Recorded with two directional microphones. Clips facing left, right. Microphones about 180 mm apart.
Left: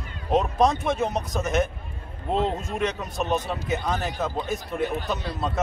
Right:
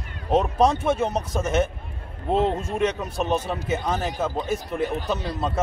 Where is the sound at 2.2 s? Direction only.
5° right (ahead or behind).